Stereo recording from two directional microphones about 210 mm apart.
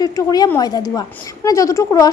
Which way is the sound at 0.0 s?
20° left (ahead or behind).